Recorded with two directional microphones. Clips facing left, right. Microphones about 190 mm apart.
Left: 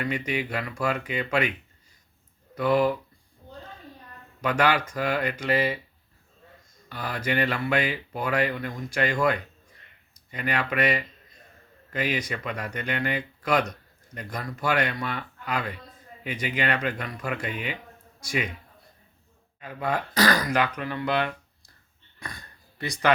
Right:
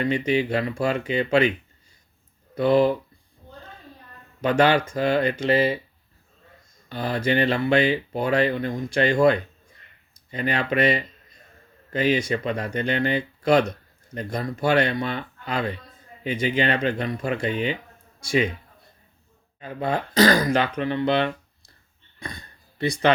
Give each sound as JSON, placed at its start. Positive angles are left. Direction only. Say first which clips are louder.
{"t": 0.0, "sound": "speech", "louder": "right 7 dB", "side_deg": -25}
{"t": 2.6, "sound": "speech", "louder": "right 4 dB", "side_deg": -30}
{"t": 4.4, "sound": "speech", "louder": "right 5 dB", "side_deg": -30}
{"t": 6.8, "sound": "speech", "louder": "right 6 dB", "side_deg": -30}
{"t": 19.5, "sound": "speech", "louder": "right 3 dB", "side_deg": -30}
{"t": 22.2, "sound": "a sound", "louder": "right 4 dB", "side_deg": -25}